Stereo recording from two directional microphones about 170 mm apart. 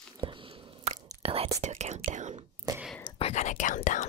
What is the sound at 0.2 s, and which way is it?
Biting, 30° right (ahead or behind).